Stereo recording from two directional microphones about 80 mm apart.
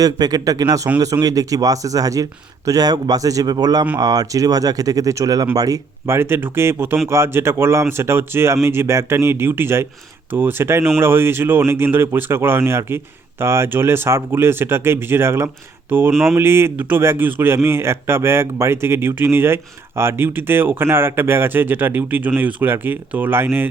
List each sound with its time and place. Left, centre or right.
0.0 s speech: right
6.1 s speech: right